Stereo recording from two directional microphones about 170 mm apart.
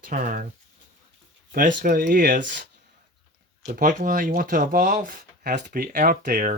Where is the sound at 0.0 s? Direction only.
55° right (ahead or behind).